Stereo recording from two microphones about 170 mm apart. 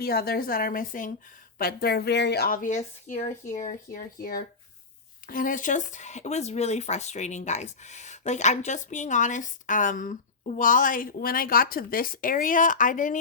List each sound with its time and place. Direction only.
0.0 s speech: 65° left (ahead or behind)